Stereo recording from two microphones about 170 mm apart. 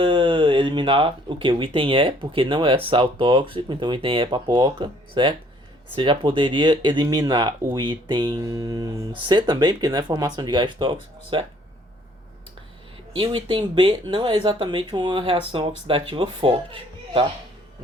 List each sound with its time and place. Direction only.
0.0 s speech: 30° right (ahead or behind)
13.1 s speech: 30° right (ahead or behind)